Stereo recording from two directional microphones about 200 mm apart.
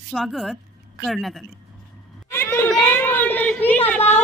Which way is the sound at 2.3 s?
10° left (ahead or behind).